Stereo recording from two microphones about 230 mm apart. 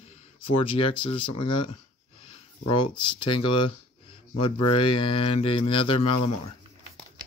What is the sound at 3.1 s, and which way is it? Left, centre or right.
Speech, left.